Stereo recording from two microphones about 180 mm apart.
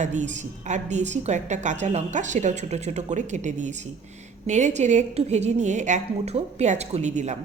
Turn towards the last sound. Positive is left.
turn(degrees=-40)  # may be behind; listen again after turning